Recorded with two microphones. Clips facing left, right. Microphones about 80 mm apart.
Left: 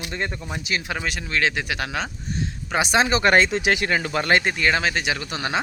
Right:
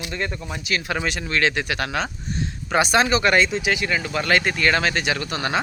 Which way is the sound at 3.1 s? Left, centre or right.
Left.